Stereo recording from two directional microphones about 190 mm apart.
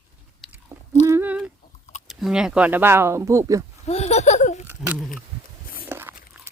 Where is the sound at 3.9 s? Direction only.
35° left (ahead or behind).